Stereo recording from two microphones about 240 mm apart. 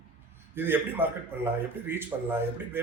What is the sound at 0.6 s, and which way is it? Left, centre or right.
A man's voice, centre.